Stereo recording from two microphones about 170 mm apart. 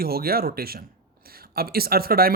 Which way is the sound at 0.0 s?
60° right (ahead or behind).